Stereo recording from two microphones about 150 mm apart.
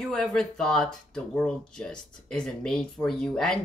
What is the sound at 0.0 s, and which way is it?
Speech, 5° left (ahead or behind).